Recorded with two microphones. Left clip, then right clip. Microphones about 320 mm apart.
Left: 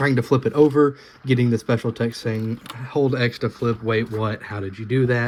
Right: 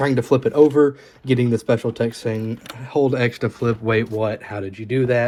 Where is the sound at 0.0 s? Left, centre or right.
Centre.